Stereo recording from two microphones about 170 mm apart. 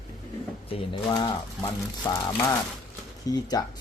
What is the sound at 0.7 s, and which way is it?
Speech, 25° left (ahead or behind).